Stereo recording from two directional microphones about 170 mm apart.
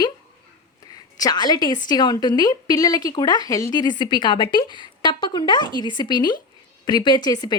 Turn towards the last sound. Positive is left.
turn(degrees=25)  # may be behind; listen again after turning